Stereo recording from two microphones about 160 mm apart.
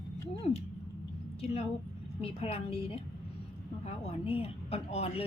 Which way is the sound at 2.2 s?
40° left (ahead or behind).